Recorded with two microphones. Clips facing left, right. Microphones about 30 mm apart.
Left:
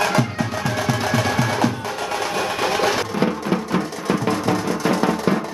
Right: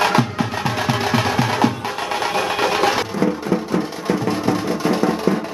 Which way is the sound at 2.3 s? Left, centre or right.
Centre.